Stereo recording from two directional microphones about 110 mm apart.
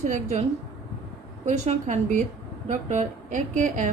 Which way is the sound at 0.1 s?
90° right.